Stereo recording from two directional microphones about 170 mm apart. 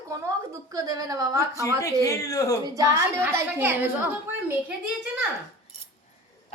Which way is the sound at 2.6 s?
20° right (ahead or behind).